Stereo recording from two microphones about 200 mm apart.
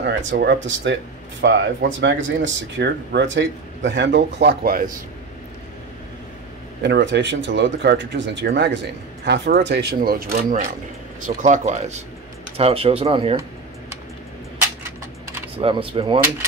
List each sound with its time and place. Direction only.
0.0 s speech: 65° right (ahead or behind); by 4.9 s 45° right (ahead or behind)
6.8 s speech: 60° right (ahead or behind); by 13.4 s 30° right (ahead or behind)
15.5 s speech: 25° right (ahead or behind)